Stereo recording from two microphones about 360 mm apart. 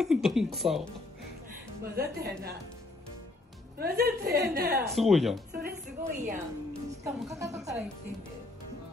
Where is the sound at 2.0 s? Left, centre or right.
Right.